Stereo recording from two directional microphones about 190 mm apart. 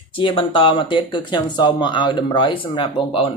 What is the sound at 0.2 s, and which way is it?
Speech, 25° left (ahead or behind).